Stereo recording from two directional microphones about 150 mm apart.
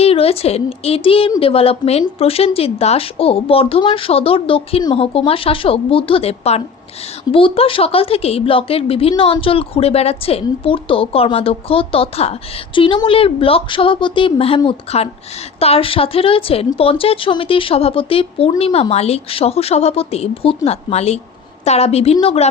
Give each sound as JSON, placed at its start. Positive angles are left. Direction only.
{"t": 0.0, "sound": "a woman's voice", "side_deg": 40}